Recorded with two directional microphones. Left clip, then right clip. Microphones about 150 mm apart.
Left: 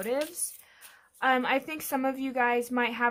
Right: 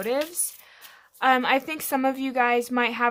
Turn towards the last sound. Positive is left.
turn(degrees=-25)  # may be behind; listen again after turning